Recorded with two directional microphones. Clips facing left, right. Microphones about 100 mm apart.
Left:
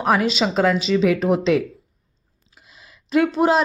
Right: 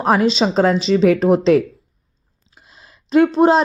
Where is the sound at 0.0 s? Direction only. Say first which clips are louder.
Right 4 dB; 35° right (ahead or behind).